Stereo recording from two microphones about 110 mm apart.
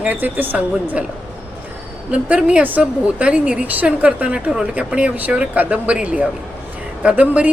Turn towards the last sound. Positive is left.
turn(degrees=-10)  # may be behind; listen again after turning